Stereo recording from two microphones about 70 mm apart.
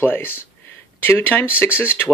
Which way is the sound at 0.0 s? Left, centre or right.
Left.